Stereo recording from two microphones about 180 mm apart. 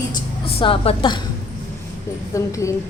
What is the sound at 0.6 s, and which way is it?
Speech, 30° left (ahead or behind).